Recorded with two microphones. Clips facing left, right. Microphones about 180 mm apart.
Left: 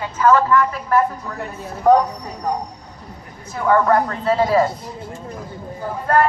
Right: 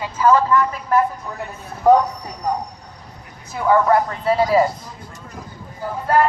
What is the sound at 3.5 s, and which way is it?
Speech, 10° right (ahead or behind).